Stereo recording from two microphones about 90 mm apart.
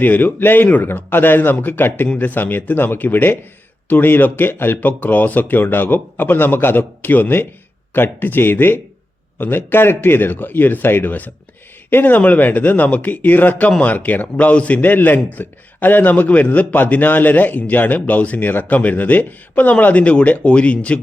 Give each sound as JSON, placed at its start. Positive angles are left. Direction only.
{"t": 0.0, "sound": "a man's voice", "side_deg": 20}